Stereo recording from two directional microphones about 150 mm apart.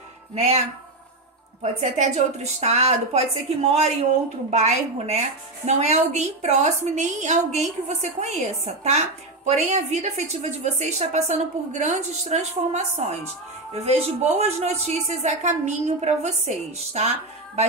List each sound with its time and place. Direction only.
0.3 s speech: 45° right (ahead or behind)
1.6 s a woman's voice: 50° right (ahead or behind)